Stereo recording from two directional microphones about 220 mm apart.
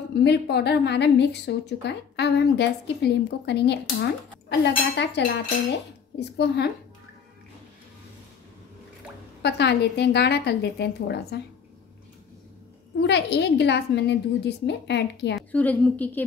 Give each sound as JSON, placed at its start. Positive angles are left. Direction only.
{"t": 0.1, "sound": "a woman's voice", "side_deg": 50}
{"t": 9.4, "sound": "a woman's voice", "side_deg": 50}
{"t": 13.0, "sound": "a woman's voice", "side_deg": 50}
{"t": 15.3, "sound": "a woman's voice", "side_deg": 5}